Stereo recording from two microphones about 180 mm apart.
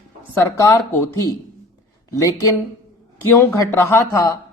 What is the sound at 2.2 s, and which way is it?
A woman's voice, 20° left (ahead or behind).